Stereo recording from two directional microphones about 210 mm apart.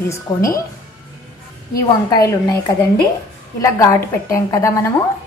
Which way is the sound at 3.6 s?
15° left (ahead or behind).